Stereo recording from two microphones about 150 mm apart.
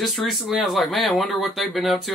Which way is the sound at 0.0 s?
Centre (ahead or behind).